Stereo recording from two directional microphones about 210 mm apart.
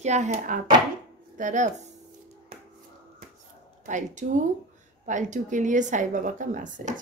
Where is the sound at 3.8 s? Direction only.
35° right (ahead or behind).